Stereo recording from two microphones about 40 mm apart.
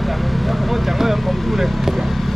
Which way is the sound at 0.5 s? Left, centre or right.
Centre.